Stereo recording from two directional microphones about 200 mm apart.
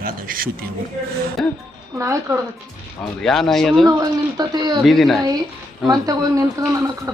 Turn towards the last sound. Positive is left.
turn(degrees=-15)  # may be behind; listen again after turning